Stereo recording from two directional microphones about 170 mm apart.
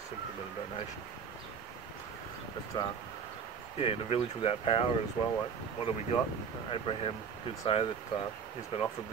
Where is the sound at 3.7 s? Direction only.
35° left (ahead or behind).